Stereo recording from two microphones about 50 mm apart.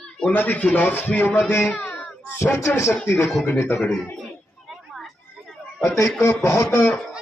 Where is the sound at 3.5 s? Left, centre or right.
Left.